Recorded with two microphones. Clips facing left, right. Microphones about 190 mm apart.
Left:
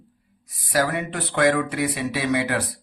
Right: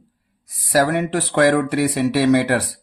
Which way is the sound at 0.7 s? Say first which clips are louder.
Right 6 dB; 70° right (ahead or behind).